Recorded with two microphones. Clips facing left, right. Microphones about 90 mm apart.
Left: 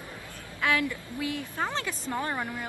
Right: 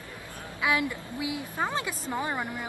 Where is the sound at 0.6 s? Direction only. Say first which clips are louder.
Even; 15° right (ahead or behind).